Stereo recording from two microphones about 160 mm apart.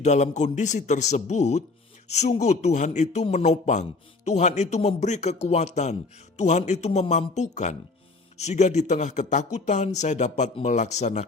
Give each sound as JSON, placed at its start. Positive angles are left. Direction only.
{"t": 0.0, "sound": "a man's voice", "side_deg": 45}